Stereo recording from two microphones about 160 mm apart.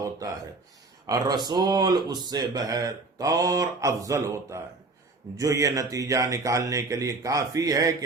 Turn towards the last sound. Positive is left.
turn(degrees=-20)  # may be behind; listen again after turning